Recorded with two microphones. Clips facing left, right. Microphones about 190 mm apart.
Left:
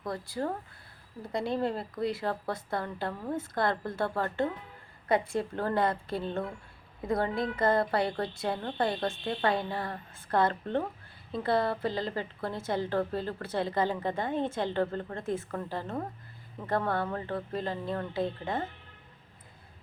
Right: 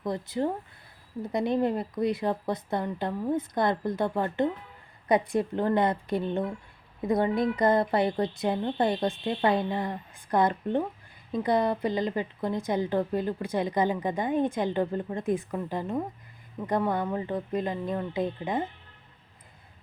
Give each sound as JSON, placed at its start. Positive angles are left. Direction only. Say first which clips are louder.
{"t": 0.0, "sound": "a woman's voice", "louder": "right 5 dB", "side_deg": -20}